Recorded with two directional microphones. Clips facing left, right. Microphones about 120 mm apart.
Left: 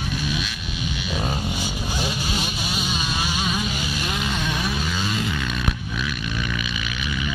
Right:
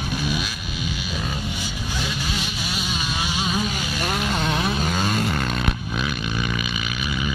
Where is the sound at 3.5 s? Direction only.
45° right (ahead or behind).